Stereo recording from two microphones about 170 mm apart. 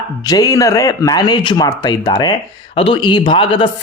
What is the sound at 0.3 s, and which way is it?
A man's voice, 20° left (ahead or behind).